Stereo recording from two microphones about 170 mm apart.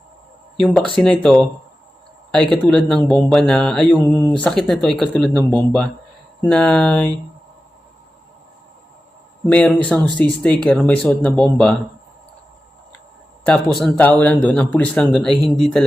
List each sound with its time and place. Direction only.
0.6 s speech: 5° left (ahead or behind)
2.5 s speech: 5° left (ahead or behind)
9.5 s speech: 10° left (ahead or behind)
13.4 s speech: centre (ahead or behind)
15.4 s speech: 30° left (ahead or behind)